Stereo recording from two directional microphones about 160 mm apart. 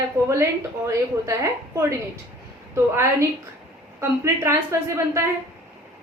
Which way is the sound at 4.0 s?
15° right (ahead or behind).